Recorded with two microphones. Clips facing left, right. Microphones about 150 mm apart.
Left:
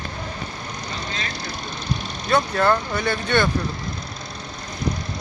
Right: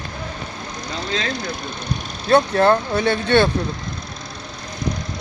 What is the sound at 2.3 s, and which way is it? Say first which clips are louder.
Speech: right 4 dB; 25° right (ahead or behind).